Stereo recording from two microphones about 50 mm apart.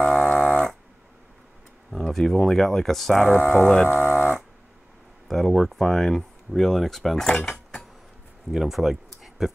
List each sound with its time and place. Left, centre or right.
0.0 s cattle: centre
1.9 s speech: centre
4.0 s livestock: left
5.3 s speech: centre
8.5 s speech: centre